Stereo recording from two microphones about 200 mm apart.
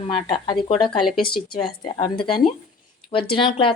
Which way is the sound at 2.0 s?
30° left (ahead or behind).